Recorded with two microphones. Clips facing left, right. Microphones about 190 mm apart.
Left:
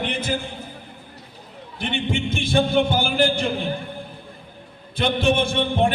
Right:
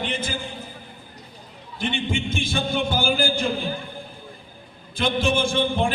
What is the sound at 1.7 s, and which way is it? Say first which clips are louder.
A man's voice: left 1 dB; 60° left (ahead or behind).